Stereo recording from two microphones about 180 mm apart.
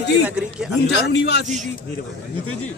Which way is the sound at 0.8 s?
70° left (ahead or behind).